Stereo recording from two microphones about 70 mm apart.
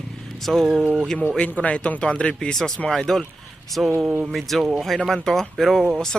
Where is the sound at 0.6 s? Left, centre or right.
Centre.